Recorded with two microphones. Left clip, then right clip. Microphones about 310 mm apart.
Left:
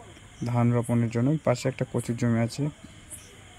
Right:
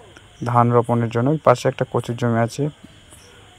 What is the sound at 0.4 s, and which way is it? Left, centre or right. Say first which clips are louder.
Speech: right 12 dB; right.